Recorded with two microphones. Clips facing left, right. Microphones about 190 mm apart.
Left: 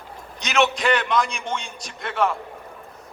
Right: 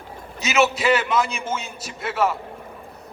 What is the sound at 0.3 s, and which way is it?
A man's voice, 5° right (ahead or behind).